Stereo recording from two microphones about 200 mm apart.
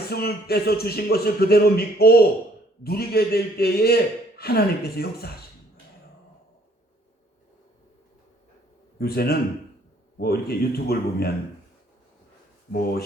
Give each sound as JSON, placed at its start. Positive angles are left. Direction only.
{"t": 0.1, "sound": "a man's voice", "side_deg": 50}
{"t": 9.0, "sound": "a man's voice", "side_deg": 50}
{"t": 12.7, "sound": "a man's voice", "side_deg": 50}